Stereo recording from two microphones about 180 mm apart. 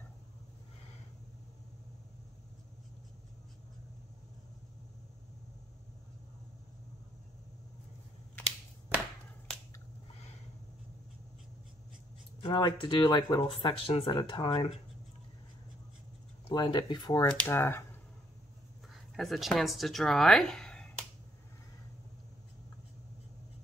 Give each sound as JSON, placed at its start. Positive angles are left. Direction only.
{"t": 12.4, "sound": "speech", "side_deg": 25}
{"t": 16.4, "sound": "speech", "side_deg": 25}
{"t": 19.1, "sound": "speech", "side_deg": 0}